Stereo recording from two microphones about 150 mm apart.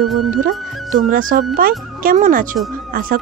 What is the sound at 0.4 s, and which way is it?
A woman's voice, 65° right (ahead or behind).